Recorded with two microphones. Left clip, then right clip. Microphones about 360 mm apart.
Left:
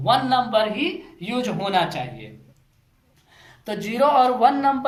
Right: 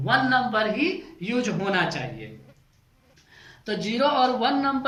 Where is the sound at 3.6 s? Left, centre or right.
Centre.